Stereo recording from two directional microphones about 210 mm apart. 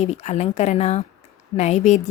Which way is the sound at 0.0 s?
30° left (ahead or behind).